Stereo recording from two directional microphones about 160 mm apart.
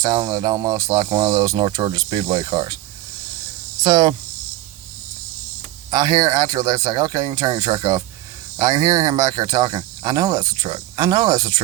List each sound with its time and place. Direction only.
0.0 s speech: 25° right (ahead or behind)
3.8 s speech: 25° right (ahead or behind)
5.9 s speech: 25° right (ahead or behind)